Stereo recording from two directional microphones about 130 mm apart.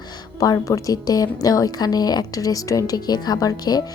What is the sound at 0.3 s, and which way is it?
A woman's voice, 25° left (ahead or behind).